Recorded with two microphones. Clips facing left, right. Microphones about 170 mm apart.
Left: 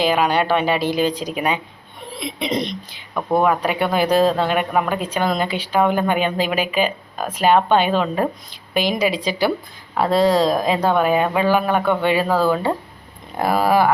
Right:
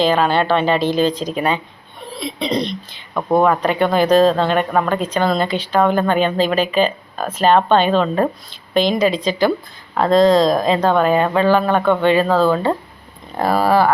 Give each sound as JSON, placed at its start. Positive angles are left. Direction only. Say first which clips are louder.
{"t": 0.0, "sound": "speech", "louder": "right 2 dB", "side_deg": 10}
{"t": 3.4, "sound": "speech", "louder": "right 3 dB", "side_deg": 10}